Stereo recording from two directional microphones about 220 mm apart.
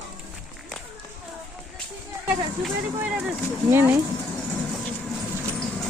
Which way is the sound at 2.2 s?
5° right (ahead or behind).